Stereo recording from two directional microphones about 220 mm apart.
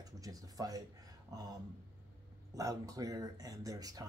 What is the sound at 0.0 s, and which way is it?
Speech, 15° right (ahead or behind).